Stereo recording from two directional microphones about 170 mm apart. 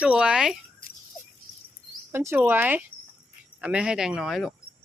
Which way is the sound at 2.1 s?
15° right (ahead or behind).